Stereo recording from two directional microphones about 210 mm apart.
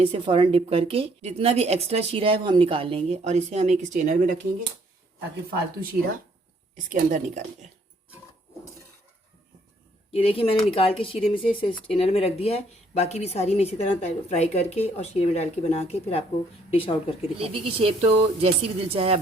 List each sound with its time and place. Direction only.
0.0 s a woman's voice: 25° right (ahead or behind)
6.9 s speech: 35° right (ahead or behind)
10.1 s a woman's voice: 25° left (ahead or behind)
17.3 s a woman's voice: 25° right (ahead or behind)